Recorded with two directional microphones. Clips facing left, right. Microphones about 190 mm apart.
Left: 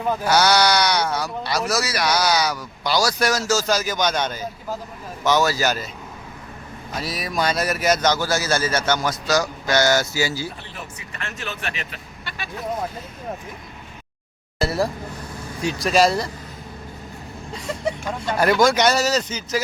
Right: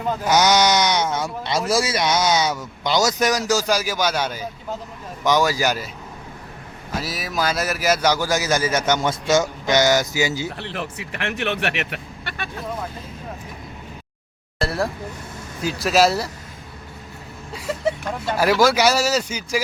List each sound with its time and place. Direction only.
0.3 s a man's voice: 15° right (ahead or behind)
6.9 s a man's voice: centre (ahead or behind); by 10.5 s 20° right (ahead or behind)
10.6 s speech: 70° right (ahead or behind)
14.6 s a sound: centre (ahead or behind)
15.6 s speech: 5° right (ahead or behind)
17.5 s a man's voice: 5° right (ahead or behind)